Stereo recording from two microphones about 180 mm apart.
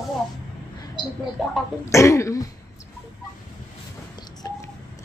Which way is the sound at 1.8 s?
15° left (ahead or behind).